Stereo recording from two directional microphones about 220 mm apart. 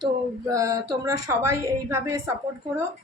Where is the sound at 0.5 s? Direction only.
15° right (ahead or behind).